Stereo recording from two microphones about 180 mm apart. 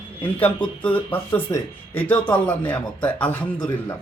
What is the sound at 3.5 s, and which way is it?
Speech, 25° left (ahead or behind).